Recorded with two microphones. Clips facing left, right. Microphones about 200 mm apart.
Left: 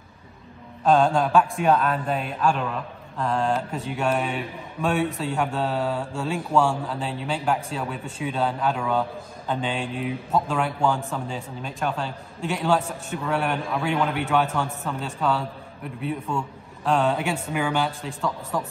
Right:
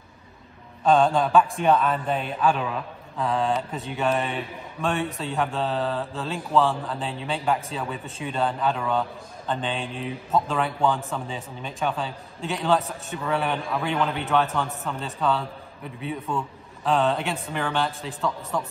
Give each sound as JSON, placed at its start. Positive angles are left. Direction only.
{"t": 0.8, "sound": "a man's voice", "side_deg": 0}